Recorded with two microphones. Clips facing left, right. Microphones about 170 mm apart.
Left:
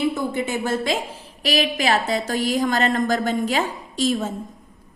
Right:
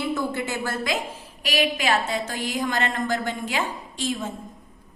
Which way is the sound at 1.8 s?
40° left (ahead or behind).